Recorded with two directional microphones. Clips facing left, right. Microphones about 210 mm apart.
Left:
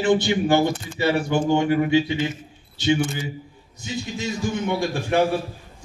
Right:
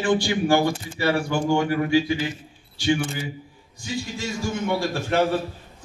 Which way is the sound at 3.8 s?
20° left (ahead or behind).